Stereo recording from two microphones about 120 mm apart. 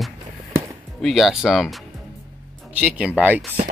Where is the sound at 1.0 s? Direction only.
Centre (ahead or behind).